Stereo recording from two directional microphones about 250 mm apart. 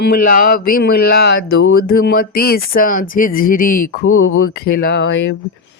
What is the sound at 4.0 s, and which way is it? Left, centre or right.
Speech, left.